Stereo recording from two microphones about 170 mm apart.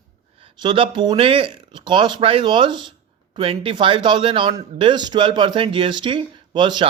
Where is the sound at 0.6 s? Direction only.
30° right (ahead or behind).